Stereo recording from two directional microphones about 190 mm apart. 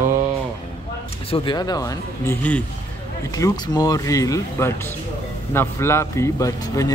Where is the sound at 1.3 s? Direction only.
25° left (ahead or behind).